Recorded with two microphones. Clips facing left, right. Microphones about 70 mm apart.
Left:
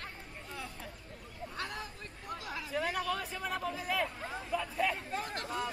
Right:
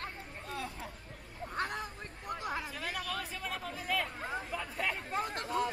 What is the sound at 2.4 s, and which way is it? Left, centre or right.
Hubbub, right.